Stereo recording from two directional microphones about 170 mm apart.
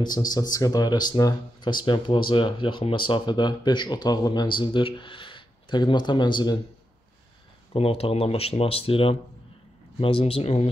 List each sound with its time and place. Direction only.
0.0 s speech: 25° left (ahead or behind)
7.7 s speech: 35° left (ahead or behind)